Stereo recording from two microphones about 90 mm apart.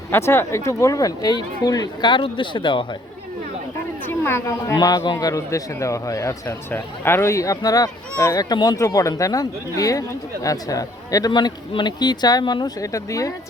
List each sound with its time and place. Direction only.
0.1 s speech: 30° left (ahead or behind); by 2.8 s 60° left (ahead or behind)
4.1 s a woman's voice: 25° left (ahead or behind)
4.4 s speech: 40° left (ahead or behind)
6.7 s speech: 25° left (ahead or behind); by 11.3 s 40° left (ahead or behind)
11.3 s speech: 60° left (ahead or behind); by 13.3 s 40° left (ahead or behind)